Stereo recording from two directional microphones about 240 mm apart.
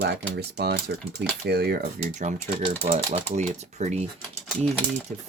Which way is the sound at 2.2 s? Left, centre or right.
Right.